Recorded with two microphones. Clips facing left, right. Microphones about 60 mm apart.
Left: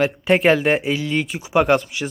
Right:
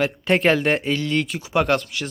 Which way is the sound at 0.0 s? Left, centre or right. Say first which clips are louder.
Left 3 dB; centre.